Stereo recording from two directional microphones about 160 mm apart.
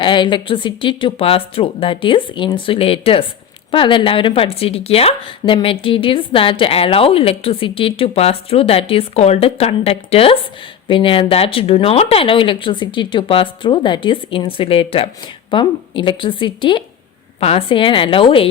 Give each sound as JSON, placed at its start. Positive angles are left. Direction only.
{"t": 0.0, "sound": "speech", "side_deg": 30}